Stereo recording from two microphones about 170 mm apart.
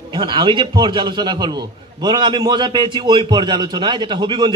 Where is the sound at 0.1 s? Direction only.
25° right (ahead or behind).